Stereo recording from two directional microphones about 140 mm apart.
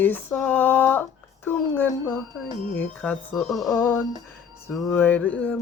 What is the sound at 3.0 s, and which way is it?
Speech, 5° left (ahead or behind).